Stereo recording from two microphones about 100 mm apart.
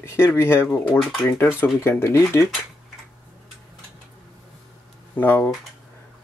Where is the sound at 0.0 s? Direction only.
25° left (ahead or behind).